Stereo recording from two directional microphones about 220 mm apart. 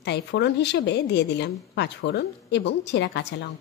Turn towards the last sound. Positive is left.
turn(degrees=50)  # may be behind; listen again after turning